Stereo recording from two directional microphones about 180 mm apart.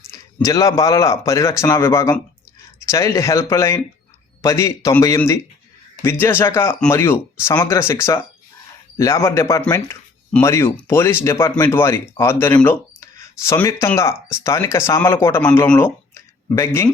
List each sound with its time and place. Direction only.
0.1 s speech: 15° left (ahead or behind)